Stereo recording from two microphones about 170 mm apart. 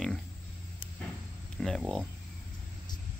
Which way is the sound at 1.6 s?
5° left (ahead or behind).